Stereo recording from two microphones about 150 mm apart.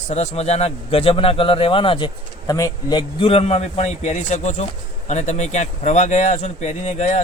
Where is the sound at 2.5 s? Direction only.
25° left (ahead or behind).